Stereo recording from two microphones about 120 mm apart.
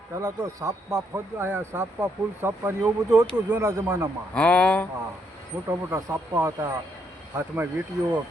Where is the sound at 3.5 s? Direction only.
30° right (ahead or behind).